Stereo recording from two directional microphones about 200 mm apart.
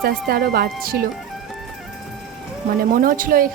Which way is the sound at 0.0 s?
50° right (ahead or behind).